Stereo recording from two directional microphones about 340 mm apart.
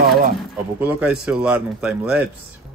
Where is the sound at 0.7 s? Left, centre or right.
Centre.